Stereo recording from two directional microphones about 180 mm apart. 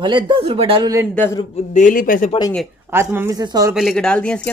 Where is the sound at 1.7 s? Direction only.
45° left (ahead or behind).